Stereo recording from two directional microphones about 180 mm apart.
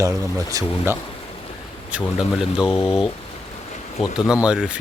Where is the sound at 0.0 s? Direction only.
20° right (ahead or behind).